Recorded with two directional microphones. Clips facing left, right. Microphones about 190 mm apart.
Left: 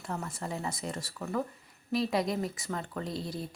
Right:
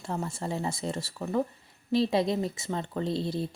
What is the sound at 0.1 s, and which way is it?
Speech, 25° right (ahead or behind).